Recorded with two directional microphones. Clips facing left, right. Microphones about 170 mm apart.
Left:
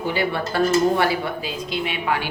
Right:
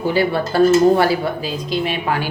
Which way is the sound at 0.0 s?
35° right (ahead or behind).